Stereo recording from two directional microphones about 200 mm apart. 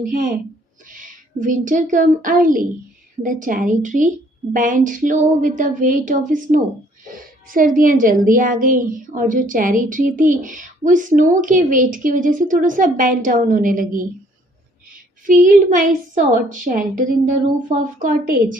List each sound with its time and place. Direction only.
0.0 s a woman's voice: 45° right (ahead or behind)
15.3 s a woman's voice: 40° right (ahead or behind)